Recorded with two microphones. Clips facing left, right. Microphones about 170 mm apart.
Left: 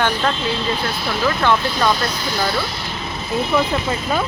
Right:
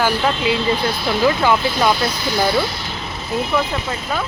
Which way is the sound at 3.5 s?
10° left (ahead or behind).